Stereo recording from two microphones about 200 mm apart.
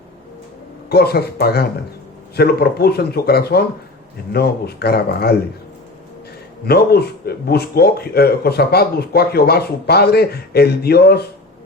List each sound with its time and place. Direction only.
0.9 s speech: 50° left (ahead or behind)
6.7 s speech: 50° left (ahead or behind)